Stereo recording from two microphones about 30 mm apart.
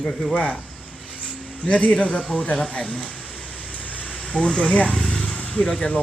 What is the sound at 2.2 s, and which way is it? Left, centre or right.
Speech, left.